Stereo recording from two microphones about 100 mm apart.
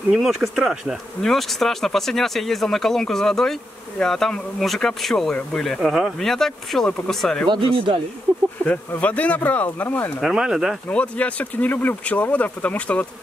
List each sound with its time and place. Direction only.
0.1 s speech: centre (ahead or behind)
7.4 s speech: 55° right (ahead or behind)
8.6 s speech: 15° left (ahead or behind)
10.2 s speech: 5° right (ahead or behind)
10.9 s speech: 15° left (ahead or behind)